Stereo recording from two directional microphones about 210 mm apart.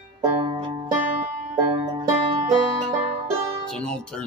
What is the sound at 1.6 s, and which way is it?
Banjo, 15° right (ahead or behind).